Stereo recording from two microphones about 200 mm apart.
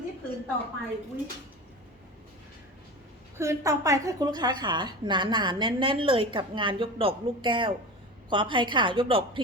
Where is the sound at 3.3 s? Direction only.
15° right (ahead or behind).